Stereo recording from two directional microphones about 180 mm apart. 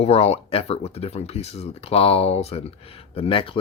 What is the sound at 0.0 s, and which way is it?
Speech, 35° left (ahead or behind).